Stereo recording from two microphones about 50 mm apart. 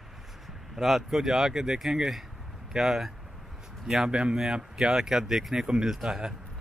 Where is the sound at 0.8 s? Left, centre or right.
Centre.